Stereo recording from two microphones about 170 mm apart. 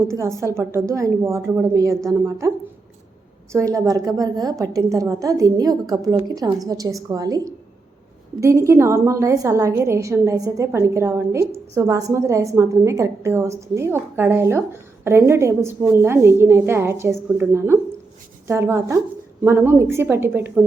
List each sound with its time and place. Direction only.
0.1 s a woman's voice: 15° right (ahead or behind)
3.5 s a woman's voice: 15° right (ahead or behind)